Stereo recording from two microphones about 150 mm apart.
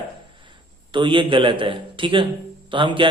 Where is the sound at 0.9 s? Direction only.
35° right (ahead or behind).